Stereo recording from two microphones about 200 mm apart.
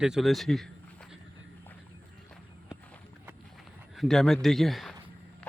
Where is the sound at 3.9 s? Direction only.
Centre (ahead or behind).